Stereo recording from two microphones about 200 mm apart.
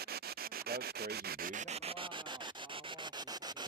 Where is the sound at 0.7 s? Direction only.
50° right (ahead or behind).